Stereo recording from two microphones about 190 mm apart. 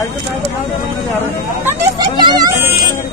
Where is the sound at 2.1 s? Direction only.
20° right (ahead or behind).